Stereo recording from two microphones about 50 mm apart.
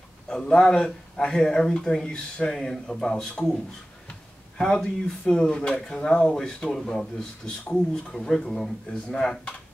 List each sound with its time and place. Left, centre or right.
0.3 s speech: centre